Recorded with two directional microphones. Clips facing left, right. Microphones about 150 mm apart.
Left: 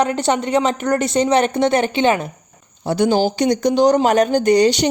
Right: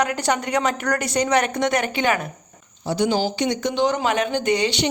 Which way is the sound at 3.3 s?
40° left (ahead or behind).